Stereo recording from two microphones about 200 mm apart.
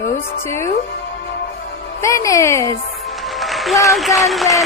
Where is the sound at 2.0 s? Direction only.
15° left (ahead or behind).